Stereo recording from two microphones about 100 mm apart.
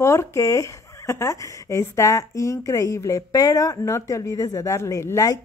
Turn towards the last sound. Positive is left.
turn(degrees=35)  # may be behind; listen again after turning